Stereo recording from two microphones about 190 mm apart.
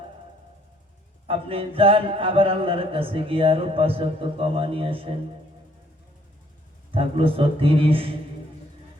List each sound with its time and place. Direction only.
1.3 s music: 30° right (ahead or behind)
6.9 s music: 30° right (ahead or behind)